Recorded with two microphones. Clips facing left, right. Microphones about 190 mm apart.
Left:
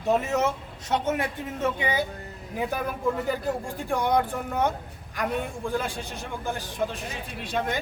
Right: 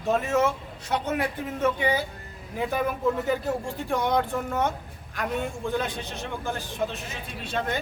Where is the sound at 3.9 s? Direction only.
10° left (ahead or behind).